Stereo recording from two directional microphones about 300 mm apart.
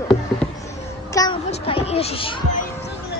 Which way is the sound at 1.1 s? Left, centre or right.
Centre.